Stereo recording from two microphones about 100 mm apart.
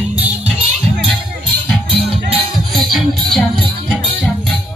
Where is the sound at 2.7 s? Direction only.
Centre (ahead or behind).